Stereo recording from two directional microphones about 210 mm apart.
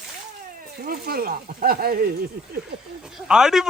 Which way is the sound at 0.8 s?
45° right (ahead or behind).